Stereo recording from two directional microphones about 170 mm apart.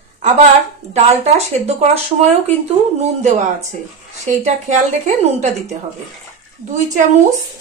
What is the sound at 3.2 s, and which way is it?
Speech, 45° right (ahead or behind).